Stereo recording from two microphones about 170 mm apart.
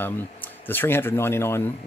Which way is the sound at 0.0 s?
10° left (ahead or behind).